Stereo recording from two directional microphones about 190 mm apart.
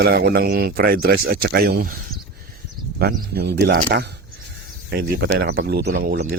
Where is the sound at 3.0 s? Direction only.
55° right (ahead or behind).